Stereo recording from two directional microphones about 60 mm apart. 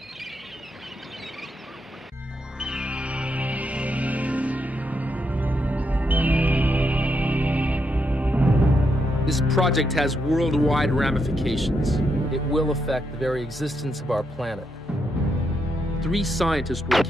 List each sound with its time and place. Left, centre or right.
2.6 s music: centre
9.2 s speech: centre
16.0 s speech: centre